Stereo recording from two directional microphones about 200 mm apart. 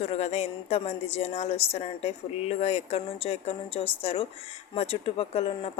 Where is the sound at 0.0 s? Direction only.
30° left (ahead or behind).